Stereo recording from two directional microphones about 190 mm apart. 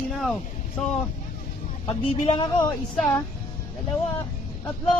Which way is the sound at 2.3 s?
25° left (ahead or behind).